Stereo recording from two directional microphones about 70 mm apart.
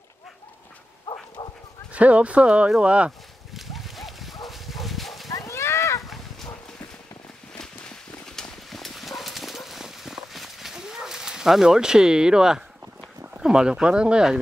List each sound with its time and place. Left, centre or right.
1.4 s dog: left
1.9 s speech: centre
3.5 s dog: centre
5.5 s a sound: left
6.0 s a sound: centre
8.3 s clip-clop: centre
13.4 s speech: centre